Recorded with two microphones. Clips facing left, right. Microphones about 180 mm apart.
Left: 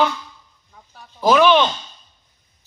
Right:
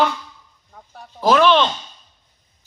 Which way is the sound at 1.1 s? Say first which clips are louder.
Left 1 dB; centre (ahead or behind).